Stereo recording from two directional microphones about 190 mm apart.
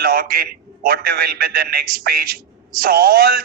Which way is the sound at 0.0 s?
50° right (ahead or behind).